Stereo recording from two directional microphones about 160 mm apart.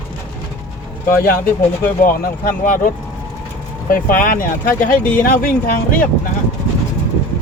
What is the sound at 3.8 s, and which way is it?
Speech, 60° left (ahead or behind).